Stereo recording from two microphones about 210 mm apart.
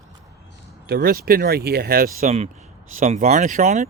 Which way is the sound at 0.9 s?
45° right (ahead or behind).